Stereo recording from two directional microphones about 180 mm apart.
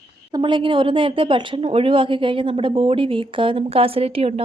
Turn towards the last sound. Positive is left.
turn(degrees=-35)  # may be behind; listen again after turning